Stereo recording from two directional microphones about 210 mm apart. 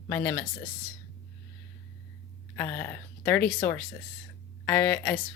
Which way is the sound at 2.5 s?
10° left (ahead or behind).